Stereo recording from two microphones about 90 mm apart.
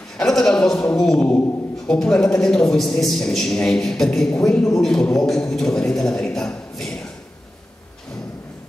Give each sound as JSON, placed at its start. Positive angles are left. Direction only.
{"t": 0.2, "sound": "a man's voice", "side_deg": 5}